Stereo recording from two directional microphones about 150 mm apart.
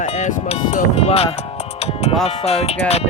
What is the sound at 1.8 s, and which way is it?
Wind chime, 40° left (ahead or behind).